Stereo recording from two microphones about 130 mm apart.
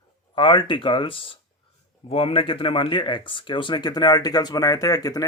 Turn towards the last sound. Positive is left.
turn(degrees=30)  # may be behind; listen again after turning